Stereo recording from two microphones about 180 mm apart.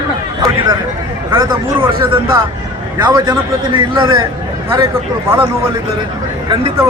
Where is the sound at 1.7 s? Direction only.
30° right (ahead or behind).